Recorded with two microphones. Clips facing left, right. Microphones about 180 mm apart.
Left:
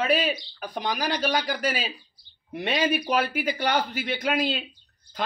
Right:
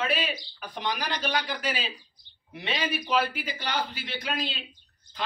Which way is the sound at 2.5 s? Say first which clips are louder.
Left 6 dB; 45° left (ahead or behind).